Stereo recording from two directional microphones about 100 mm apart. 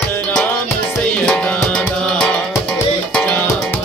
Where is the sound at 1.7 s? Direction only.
10° left (ahead or behind).